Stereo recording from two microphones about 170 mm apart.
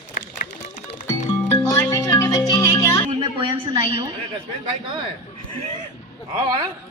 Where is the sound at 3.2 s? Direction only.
30° right (ahead or behind).